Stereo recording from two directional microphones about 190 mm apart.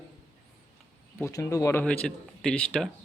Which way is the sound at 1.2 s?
20° left (ahead or behind).